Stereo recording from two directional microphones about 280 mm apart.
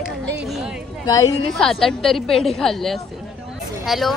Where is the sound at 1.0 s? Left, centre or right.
Centre.